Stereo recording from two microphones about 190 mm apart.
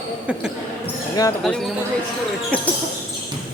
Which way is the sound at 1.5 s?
5° left (ahead or behind).